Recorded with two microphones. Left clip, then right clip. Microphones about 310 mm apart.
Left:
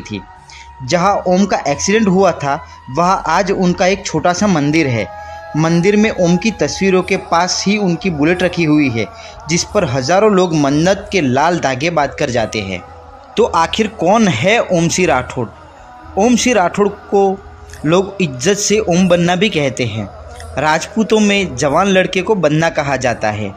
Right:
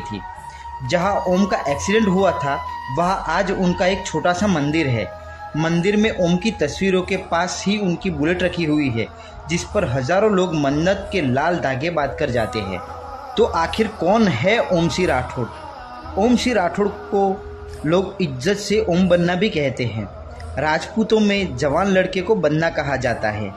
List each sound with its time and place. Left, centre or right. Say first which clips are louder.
0.8 s speech: left 6 dB; centre